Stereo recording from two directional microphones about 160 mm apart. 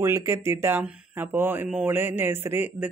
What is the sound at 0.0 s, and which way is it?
Speech, 20° right (ahead or behind).